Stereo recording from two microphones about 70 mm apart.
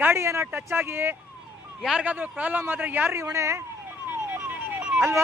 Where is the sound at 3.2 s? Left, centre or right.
Right.